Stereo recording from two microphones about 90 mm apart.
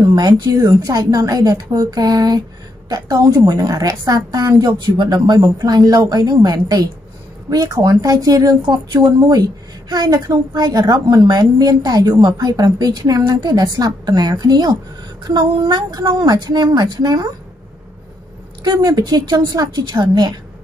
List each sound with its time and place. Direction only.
0.0 s a woman's voice: 50° right (ahead or behind)
18.6 s a woman's voice: 50° right (ahead or behind)